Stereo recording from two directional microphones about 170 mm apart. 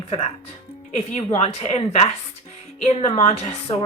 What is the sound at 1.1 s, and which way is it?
Speech, 35° left (ahead or behind).